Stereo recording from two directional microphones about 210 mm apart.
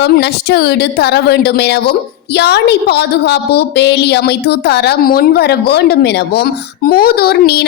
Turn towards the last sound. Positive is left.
turn(degrees=50)  # may be behind; listen again after turning